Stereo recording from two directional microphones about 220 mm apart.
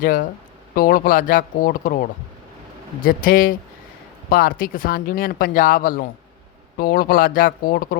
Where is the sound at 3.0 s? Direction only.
40° left (ahead or behind).